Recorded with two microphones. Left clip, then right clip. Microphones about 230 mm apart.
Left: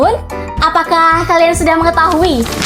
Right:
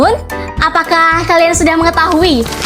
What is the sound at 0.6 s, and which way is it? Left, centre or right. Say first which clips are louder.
Music: even; right.